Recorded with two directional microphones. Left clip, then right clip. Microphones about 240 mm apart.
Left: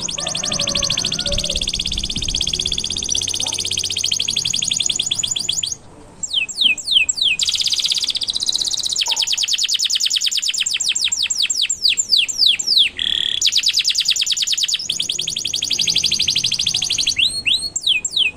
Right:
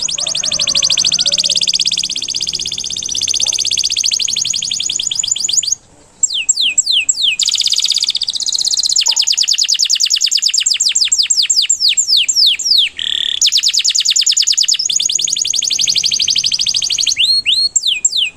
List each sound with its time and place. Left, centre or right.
0.7 s music: centre
3.3 s a sound: centre
6.6 s bird: centre
15.8 s music: centre